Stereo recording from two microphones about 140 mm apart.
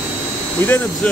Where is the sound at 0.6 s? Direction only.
15° left (ahead or behind).